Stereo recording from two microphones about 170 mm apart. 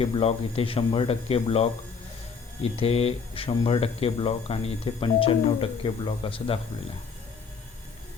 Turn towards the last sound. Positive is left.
turn(degrees=30)  # may be behind; listen again after turning